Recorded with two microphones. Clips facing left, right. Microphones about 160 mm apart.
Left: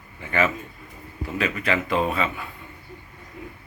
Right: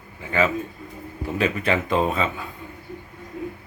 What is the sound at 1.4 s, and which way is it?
Speech, 30° right (ahead or behind).